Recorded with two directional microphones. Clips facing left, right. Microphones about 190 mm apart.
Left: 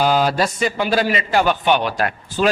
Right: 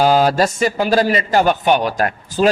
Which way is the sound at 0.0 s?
40° right (ahead or behind).